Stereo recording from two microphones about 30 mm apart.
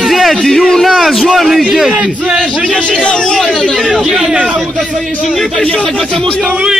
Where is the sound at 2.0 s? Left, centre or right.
Right.